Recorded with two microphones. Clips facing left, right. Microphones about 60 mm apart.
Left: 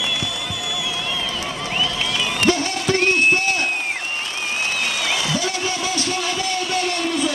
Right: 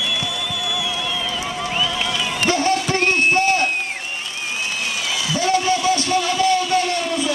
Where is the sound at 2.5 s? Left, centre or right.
Right.